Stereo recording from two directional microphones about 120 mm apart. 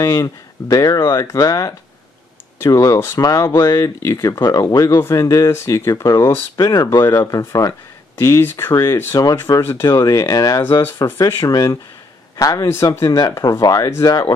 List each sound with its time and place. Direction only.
0.0 s speech: 30° left (ahead or behind)
8.9 s speech: 30° left (ahead or behind)
10.6 s speech: 15° left (ahead or behind)